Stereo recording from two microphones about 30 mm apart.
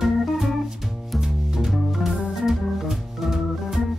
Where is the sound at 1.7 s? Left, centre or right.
Centre.